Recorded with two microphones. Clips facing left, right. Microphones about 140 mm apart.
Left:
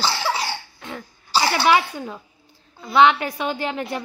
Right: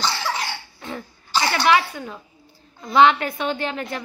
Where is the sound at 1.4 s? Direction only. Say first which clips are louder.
Even; 25° left (ahead or behind).